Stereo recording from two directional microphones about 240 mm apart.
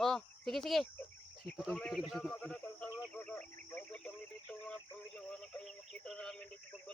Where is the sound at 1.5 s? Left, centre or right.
Centre.